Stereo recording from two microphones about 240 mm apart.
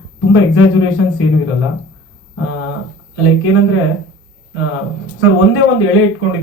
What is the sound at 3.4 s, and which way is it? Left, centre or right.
Speech, left.